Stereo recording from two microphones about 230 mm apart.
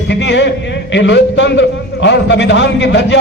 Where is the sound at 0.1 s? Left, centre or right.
Left.